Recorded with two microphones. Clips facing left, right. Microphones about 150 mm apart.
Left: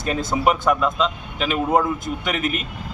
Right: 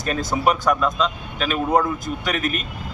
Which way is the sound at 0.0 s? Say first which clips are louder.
Left 1 dB; 25° left (ahead or behind).